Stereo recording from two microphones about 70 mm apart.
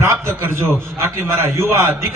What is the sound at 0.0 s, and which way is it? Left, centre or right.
A man's voice, right.